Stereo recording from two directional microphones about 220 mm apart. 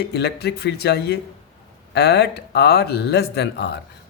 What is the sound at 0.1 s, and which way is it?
Speech, 50° left (ahead or behind).